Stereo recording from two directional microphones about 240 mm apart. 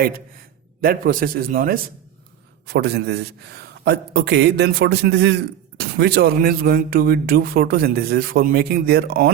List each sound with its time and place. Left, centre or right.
0.8 s a man's voice: right